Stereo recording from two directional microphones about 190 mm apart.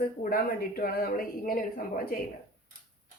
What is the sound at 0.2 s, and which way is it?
A woman's voice, 50° left (ahead or behind).